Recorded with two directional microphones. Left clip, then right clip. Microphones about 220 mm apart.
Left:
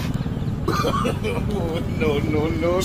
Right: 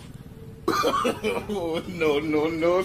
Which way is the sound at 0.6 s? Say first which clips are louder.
Even; centre (ahead or behind).